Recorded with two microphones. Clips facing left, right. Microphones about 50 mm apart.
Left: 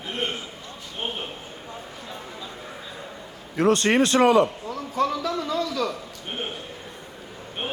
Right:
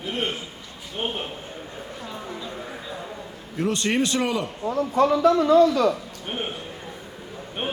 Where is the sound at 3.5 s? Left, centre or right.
Left.